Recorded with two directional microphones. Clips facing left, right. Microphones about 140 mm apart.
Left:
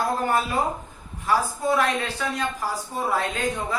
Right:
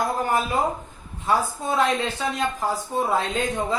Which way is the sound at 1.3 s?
20° right (ahead or behind).